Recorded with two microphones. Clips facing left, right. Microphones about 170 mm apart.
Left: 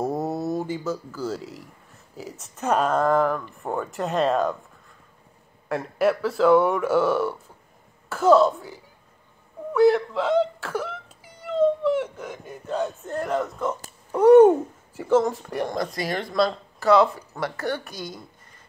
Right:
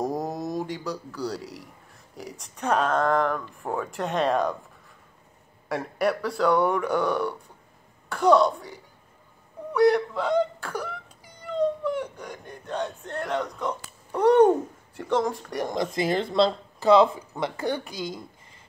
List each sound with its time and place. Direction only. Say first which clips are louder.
0.0 s a sound: left 3 dB; centre (ahead or behind)
2.1 s speech: left 2 dB; 5° left (ahead or behind)
5.7 s speech: left 3 dB; centre (ahead or behind)
9.7 s whimper: left 2 dB; centre (ahead or behind)
14.1 s owl: left 5 dB; 5° left (ahead or behind)
15.0 s speech: left 5 dB; 5° left (ahead or behind)
15.7 s speech: right 2 dB; 20° right (ahead or behind)